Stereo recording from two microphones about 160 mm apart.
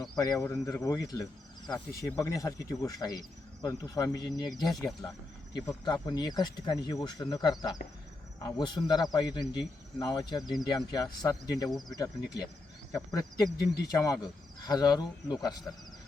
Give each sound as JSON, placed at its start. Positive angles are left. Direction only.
{"t": 0.0, "sound": "cricket", "side_deg": 25}